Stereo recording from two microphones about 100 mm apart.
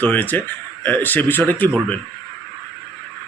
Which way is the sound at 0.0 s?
15° left (ahead or behind).